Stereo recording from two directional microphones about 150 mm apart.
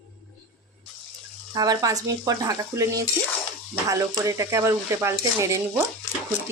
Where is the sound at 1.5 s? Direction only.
25° right (ahead or behind).